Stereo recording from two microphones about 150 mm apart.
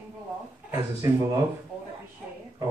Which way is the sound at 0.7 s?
20° right (ahead or behind).